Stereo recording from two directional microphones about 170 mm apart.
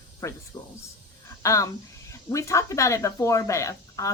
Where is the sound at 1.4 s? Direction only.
20° left (ahead or behind).